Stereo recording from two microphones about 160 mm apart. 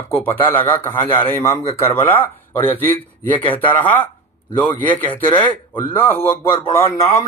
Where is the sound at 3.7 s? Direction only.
10° left (ahead or behind).